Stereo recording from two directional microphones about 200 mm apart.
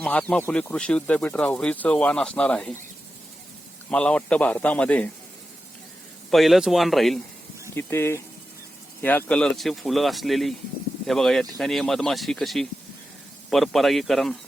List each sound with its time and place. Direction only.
0.0 s speech: 5° left (ahead or behind)
3.8 s speech: 5° left (ahead or behind)
6.3 s speech: centre (ahead or behind)
7.8 s speech: 10° left (ahead or behind)